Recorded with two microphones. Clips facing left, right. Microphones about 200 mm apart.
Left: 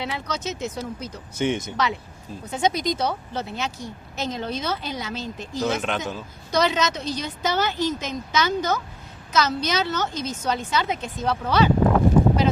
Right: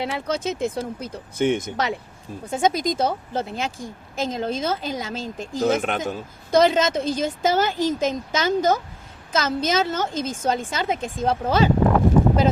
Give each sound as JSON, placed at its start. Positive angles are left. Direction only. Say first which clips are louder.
{"t": 0.0, "sound": "a woman's voice", "louder": "right 4 dB", "side_deg": -50}